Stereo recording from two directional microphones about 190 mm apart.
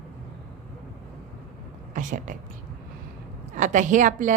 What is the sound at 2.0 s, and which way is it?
Speech, 40° right (ahead or behind).